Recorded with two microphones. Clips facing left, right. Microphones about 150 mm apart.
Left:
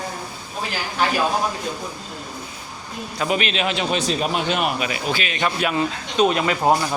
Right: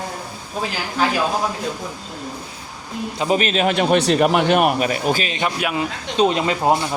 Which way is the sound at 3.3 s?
40° right (ahead or behind).